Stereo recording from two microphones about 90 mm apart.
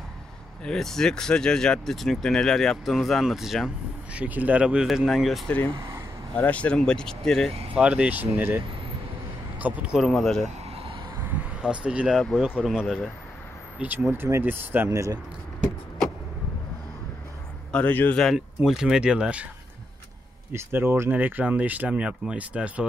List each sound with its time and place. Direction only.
0.7 s speech: 5° left (ahead or behind)
4.2 s speech: 15° right (ahead or behind); by 5.4 s centre (ahead or behind)
6.3 s speech: 15° left (ahead or behind)
7.7 s speech: 15° right (ahead or behind)
10.0 s speech: 5° left (ahead or behind)
11.6 s speech: 10° right (ahead or behind)
13.7 s speech: 20° right (ahead or behind)
14.9 s speech: 35° right (ahead or behind)
17.7 s a man's voice: 20° left (ahead or behind)
18.1 s speech: centre (ahead or behind)
20.5 s speech: 25° right (ahead or behind)